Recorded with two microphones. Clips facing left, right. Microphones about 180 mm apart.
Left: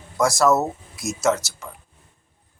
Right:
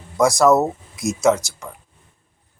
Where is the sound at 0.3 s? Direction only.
15° right (ahead or behind).